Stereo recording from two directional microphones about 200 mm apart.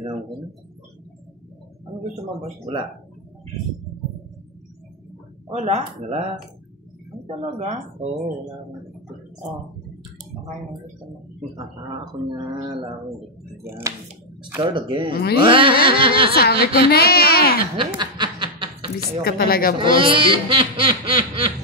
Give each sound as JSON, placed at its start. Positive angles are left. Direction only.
{"t": 5.5, "sound": "speech", "side_deg": -35}
{"t": 7.2, "sound": "speech", "side_deg": -30}
{"t": 11.5, "sound": "snicker", "side_deg": -25}
{"t": 13.7, "sound": "speech", "side_deg": -15}
{"t": 14.6, "sound": "snicker", "side_deg": -25}
{"t": 15.1, "sound": "speech", "side_deg": 50}
{"t": 15.4, "sound": "snicker", "side_deg": -25}
{"t": 16.3, "sound": "speech", "side_deg": 50}
{"t": 17.7, "sound": "snicker", "side_deg": -25}
{"t": 19.2, "sound": "speech", "side_deg": 50}
{"t": 19.8, "sound": "snicker", "side_deg": -25}